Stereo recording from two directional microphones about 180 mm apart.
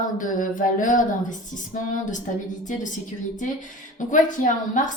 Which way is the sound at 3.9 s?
45° left (ahead or behind).